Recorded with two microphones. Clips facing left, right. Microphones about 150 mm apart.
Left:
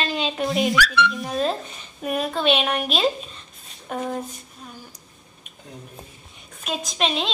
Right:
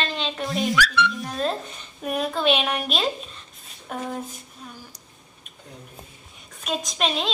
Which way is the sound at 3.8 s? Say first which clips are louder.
Left 3 dB; centre (ahead or behind).